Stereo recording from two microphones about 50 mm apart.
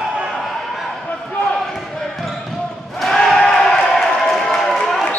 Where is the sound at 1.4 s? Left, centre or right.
Centre.